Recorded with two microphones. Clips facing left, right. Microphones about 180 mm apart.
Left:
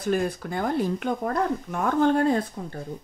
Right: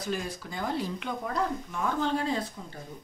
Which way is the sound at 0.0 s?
55° left (ahead or behind).